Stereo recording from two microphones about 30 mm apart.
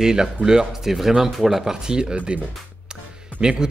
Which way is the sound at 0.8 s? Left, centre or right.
Centre.